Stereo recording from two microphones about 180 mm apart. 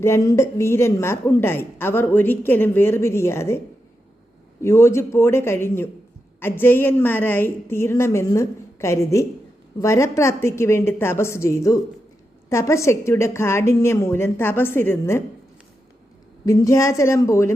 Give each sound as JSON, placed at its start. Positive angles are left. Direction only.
{"t": 0.0, "sound": "speech", "side_deg": 15}
{"t": 4.6, "sound": "speech", "side_deg": 15}
{"t": 16.5, "sound": "speech", "side_deg": 15}